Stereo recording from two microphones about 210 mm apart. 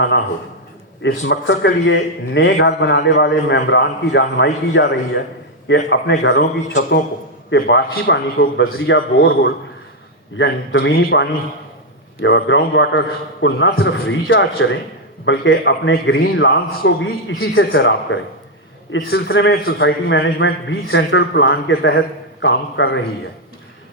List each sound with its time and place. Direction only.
1.0 s a man's voice: 60° left (ahead or behind)
9.0 s a man's voice: 45° left (ahead or behind)
10.3 s a man's voice: 60° left (ahead or behind)
18.9 s a man's voice: 65° left (ahead or behind)
19.6 s a man's voice: 50° left (ahead or behind)